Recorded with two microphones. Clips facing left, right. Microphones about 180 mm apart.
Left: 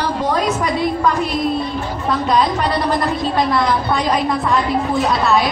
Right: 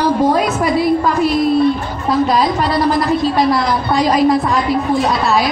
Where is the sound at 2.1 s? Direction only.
5° right (ahead or behind).